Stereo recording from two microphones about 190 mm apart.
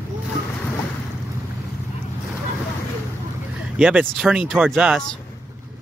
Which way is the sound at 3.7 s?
5° right (ahead or behind).